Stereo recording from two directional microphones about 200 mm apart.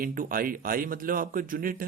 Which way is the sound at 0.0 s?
45° right (ahead or behind).